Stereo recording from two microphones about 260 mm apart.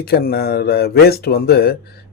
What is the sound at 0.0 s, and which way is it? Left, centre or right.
Speech, left.